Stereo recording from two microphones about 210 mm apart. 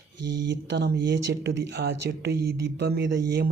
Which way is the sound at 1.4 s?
60° right (ahead or behind).